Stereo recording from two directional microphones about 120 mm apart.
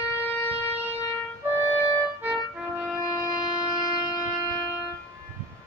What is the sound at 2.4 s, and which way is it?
Music, 5° right (ahead or behind).